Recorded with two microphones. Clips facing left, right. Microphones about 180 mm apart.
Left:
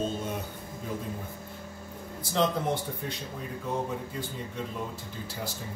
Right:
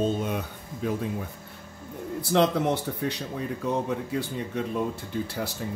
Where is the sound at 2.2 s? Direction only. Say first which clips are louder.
Right 5 dB; 70° right (ahead or behind).